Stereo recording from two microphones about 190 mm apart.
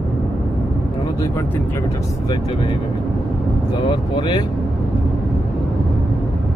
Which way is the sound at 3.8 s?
25° left (ahead or behind).